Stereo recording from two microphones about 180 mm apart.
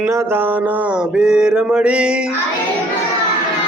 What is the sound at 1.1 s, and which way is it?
Mantra, 5° right (ahead or behind).